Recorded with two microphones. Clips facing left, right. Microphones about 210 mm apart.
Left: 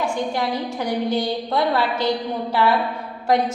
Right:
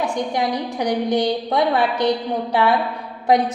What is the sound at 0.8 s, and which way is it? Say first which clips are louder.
A woman's voice: right 4 dB; 15° right (ahead or behind).